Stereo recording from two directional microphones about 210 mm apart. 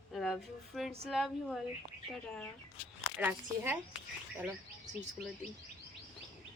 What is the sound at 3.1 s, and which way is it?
Speech, 10° right (ahead or behind).